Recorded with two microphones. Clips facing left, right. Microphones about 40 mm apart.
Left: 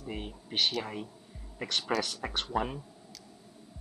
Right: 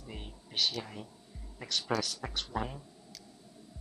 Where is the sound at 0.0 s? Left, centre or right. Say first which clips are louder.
Left 7 dB; left.